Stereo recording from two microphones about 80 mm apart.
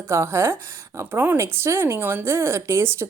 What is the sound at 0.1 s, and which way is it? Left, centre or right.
Speech, right.